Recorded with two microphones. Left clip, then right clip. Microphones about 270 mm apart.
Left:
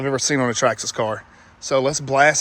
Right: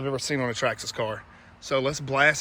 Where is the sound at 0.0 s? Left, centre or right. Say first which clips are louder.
Left 7 dB; left.